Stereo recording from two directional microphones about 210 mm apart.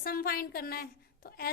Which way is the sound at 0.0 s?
45° left (ahead or behind).